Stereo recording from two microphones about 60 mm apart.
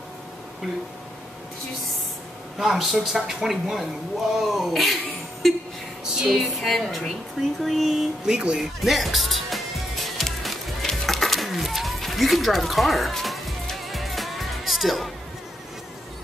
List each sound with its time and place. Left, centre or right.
2.6 s speech: centre
6.1 s speech: centre
8.3 s speech: centre
8.8 s music: centre